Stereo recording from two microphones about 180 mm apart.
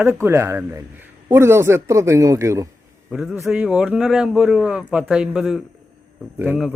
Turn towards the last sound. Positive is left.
turn(degrees=-10)  # may be behind; listen again after turning